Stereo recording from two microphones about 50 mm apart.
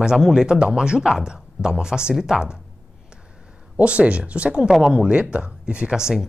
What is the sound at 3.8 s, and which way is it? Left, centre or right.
A woman's voice, right.